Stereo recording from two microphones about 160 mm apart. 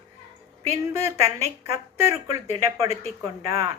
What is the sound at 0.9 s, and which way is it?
A woman's voice, 20° right (ahead or behind).